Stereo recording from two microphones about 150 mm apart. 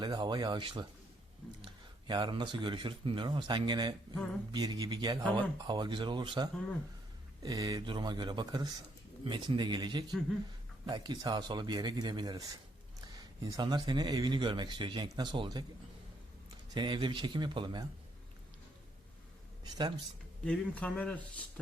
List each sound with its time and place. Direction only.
0.0 s speech: 30° right (ahead or behind)
16.7 s speech: 30° right (ahead or behind)
19.6 s speech: 25° right (ahead or behind)
20.4 s speech: 5° left (ahead or behind)